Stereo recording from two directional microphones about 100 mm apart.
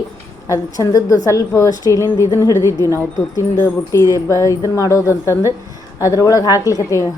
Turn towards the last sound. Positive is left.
turn(degrees=30)  # may be behind; listen again after turning